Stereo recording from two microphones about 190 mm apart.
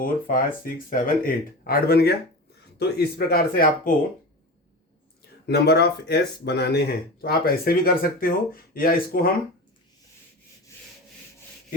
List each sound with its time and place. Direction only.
0.0 s speech: 50° left (ahead or behind)
5.5 s speech: 60° left (ahead or behind)